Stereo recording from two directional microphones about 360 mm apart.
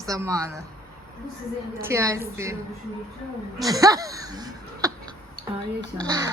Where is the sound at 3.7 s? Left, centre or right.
Centre.